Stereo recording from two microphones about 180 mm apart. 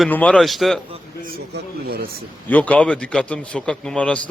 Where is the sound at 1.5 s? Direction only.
60° right (ahead or behind).